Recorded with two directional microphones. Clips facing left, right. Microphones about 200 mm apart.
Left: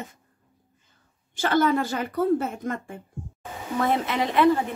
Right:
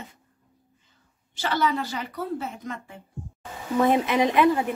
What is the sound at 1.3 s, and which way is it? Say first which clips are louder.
Speech: left 4 dB; 50° left (ahead or behind).